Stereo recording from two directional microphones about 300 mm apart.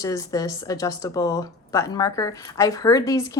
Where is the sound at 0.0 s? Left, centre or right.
Centre.